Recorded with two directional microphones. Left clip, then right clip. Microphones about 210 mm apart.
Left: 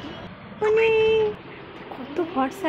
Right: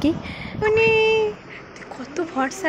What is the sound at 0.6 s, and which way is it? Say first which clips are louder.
Child singing: right 2 dB; centre (ahead or behind).